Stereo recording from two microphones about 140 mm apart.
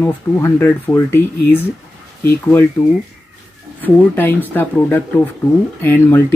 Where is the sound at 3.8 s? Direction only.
15° left (ahead or behind).